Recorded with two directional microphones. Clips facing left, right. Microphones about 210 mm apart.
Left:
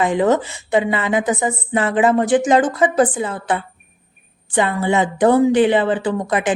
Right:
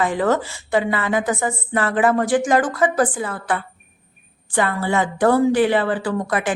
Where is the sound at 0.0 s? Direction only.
20° left (ahead or behind).